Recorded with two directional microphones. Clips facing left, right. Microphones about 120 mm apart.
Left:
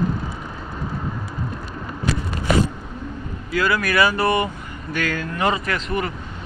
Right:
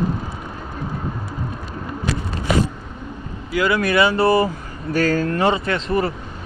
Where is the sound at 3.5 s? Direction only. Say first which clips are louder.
Right 2 dB; 20° right (ahead or behind).